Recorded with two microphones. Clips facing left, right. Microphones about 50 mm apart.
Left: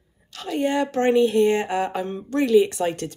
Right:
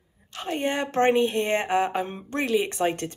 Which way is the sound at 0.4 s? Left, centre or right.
Right.